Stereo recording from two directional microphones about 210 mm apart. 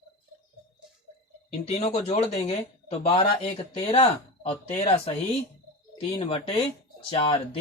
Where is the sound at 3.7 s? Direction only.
30° left (ahead or behind).